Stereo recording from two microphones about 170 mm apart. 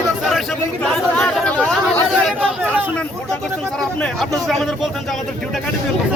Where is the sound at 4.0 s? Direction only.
5° left (ahead or behind).